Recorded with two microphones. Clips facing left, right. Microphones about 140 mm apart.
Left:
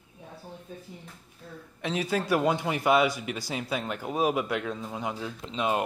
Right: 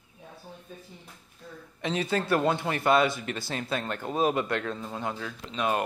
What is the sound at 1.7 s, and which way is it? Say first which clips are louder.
A man's voice: even; 5° left (ahead or behind).